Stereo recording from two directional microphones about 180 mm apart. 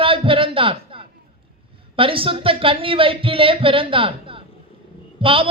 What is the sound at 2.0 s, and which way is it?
A man's voice, 30° right (ahead or behind).